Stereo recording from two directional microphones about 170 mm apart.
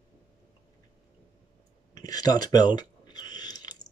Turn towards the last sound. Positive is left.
turn(degrees=25)  # may be behind; listen again after turning